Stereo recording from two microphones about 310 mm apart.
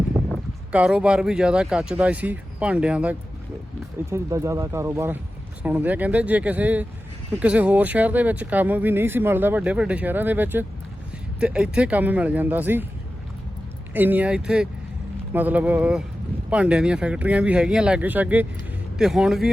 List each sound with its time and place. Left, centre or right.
0.3 s speech: centre
13.9 s speech: centre